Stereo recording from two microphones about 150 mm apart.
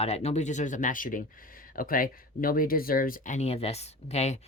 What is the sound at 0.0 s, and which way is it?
Speech, 45° left (ahead or behind).